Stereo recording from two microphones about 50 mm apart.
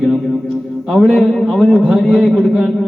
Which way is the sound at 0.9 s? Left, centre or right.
Centre.